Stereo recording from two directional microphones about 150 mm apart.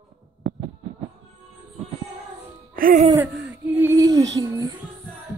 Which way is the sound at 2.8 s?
70° right (ahead or behind).